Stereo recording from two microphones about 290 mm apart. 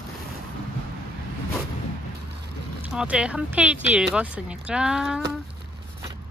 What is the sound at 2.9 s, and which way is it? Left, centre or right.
Speech, centre.